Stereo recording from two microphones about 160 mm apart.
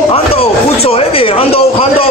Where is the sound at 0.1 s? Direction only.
35° left (ahead or behind).